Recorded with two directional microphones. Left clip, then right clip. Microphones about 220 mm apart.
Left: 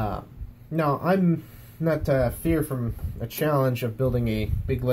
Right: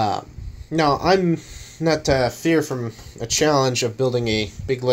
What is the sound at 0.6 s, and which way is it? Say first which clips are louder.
Speech: right 6 dB; 35° right (ahead or behind).